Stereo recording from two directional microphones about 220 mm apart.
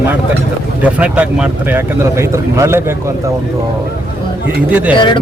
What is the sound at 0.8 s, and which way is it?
Speech, 5° right (ahead or behind).